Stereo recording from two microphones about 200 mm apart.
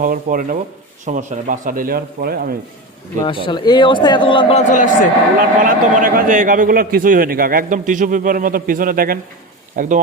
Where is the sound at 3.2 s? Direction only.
25° left (ahead or behind).